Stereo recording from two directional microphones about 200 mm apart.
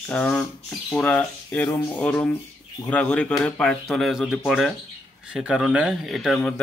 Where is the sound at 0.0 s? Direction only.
10° left (ahead or behind).